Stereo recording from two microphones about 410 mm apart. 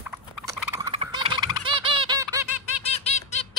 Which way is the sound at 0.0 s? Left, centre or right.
Centre.